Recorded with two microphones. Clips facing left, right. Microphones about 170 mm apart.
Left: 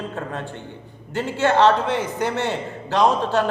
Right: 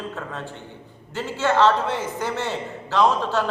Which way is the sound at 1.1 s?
60° left (ahead or behind).